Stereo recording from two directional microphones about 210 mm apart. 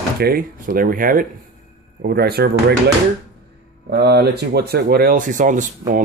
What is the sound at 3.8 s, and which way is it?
Speech, 50° right (ahead or behind).